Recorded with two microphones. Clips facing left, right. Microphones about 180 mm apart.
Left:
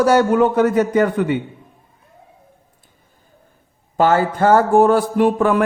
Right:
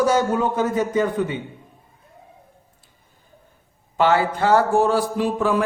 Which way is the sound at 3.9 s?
45° left (ahead or behind).